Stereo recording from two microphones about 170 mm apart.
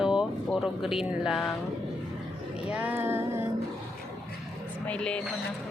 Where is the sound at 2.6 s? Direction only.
10° right (ahead or behind).